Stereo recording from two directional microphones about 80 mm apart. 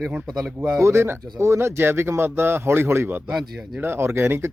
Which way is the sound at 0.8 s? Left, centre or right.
Right.